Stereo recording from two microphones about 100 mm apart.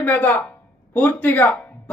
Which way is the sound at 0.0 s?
15° left (ahead or behind).